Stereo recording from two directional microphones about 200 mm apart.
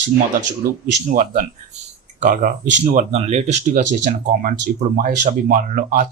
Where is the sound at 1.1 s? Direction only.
45° right (ahead or behind).